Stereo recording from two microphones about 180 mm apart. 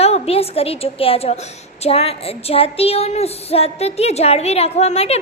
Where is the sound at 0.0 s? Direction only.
35° left (ahead or behind).